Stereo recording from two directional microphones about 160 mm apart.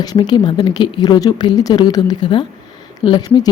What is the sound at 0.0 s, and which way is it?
A woman's voice, 25° left (ahead or behind).